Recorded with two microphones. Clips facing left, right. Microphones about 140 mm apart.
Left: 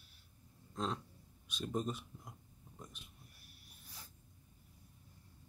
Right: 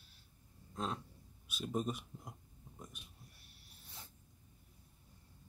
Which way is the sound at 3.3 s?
25° right (ahead or behind).